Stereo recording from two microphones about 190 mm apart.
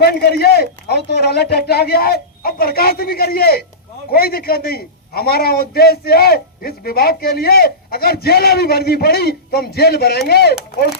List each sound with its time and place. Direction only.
0.0 s a man's voice: 55° left (ahead or behind)